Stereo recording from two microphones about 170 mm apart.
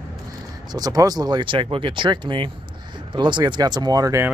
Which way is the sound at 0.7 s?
20° right (ahead or behind).